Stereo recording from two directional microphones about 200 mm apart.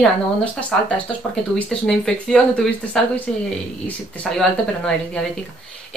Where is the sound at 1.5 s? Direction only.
5° left (ahead or behind).